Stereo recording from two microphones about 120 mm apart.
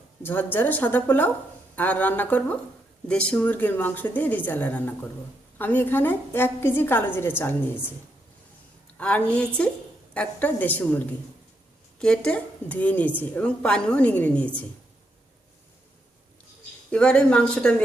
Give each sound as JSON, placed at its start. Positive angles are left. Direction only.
{"t": 0.2, "sound": "a woman's voice", "side_deg": 15}
{"t": 9.0, "sound": "a woman's voice", "side_deg": 10}
{"t": 16.9, "sound": "a woman's voice", "side_deg": 10}